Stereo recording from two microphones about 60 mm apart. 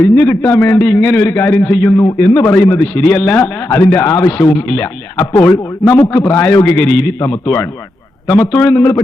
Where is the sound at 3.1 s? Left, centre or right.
Left.